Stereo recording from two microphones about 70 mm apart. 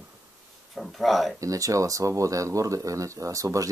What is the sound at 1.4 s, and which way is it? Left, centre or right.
Speech, right.